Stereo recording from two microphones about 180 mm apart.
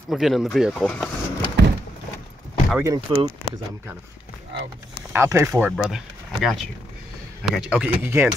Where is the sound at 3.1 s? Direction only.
20° right (ahead or behind).